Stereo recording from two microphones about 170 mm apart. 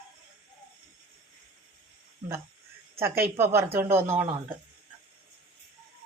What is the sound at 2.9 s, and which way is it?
Speech, 15° right (ahead or behind).